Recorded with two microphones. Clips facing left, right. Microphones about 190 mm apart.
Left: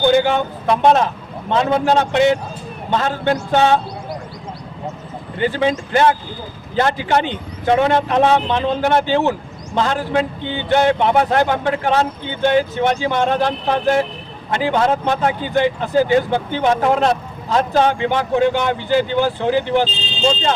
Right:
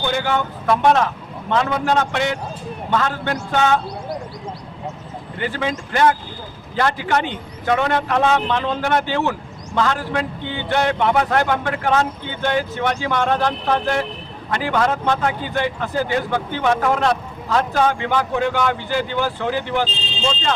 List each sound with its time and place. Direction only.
0.2 s speech: 25° left (ahead or behind)
5.4 s speech: 25° left (ahead or behind)